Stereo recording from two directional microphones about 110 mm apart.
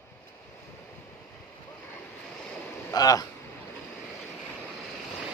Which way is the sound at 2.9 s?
35° left (ahead or behind).